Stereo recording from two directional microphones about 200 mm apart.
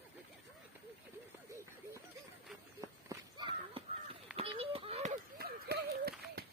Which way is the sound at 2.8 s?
20° right (ahead or behind).